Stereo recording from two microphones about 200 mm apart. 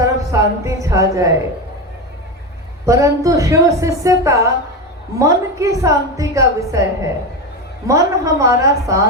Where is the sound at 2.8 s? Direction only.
15° right (ahead or behind).